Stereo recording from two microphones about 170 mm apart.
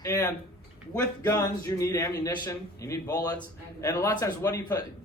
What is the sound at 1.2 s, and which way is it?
A man's voice, 20° left (ahead or behind).